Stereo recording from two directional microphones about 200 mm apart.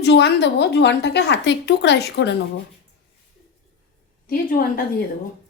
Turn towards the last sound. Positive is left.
turn(degrees=45)  # may be behind; listen again after turning